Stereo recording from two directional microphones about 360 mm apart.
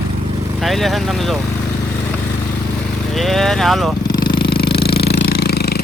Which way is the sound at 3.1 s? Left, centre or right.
Centre.